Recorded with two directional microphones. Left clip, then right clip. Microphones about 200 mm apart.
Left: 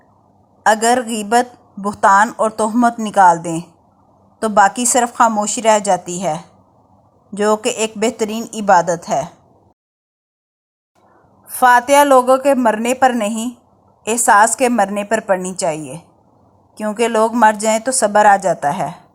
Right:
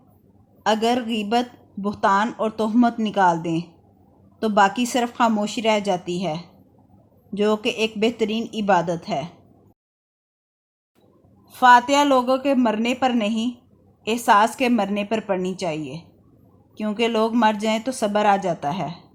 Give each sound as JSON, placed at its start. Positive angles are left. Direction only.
{"t": 0.6, "sound": "a woman's voice", "side_deg": 20}
{"t": 11.5, "sound": "a woman's voice", "side_deg": 20}
{"t": 16.8, "sound": "a woman's voice", "side_deg": 20}